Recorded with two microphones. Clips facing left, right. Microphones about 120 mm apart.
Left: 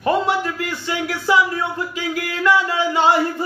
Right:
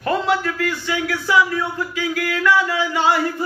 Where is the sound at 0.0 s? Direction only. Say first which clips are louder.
Left 1 dB; 20° left (ahead or behind).